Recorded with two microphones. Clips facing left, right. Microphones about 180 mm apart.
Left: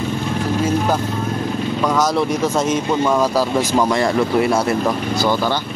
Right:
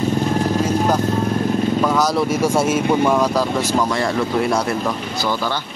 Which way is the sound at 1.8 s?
Centre (ahead or behind).